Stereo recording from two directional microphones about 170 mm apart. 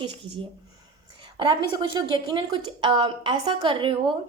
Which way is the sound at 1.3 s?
30° right (ahead or behind).